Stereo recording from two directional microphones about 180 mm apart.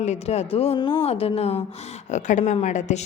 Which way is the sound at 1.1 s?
35° left (ahead or behind).